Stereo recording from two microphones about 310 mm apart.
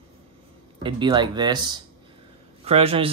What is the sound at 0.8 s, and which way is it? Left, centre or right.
Speech, centre.